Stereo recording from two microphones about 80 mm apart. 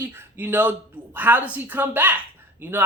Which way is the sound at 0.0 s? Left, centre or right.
Right.